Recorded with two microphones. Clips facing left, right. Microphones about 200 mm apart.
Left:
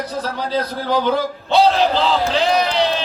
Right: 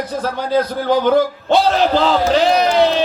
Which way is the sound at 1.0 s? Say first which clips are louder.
Right 5 dB; 50° right (ahead or behind).